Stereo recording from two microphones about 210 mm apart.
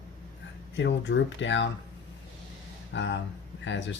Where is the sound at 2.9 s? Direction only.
60° left (ahead or behind).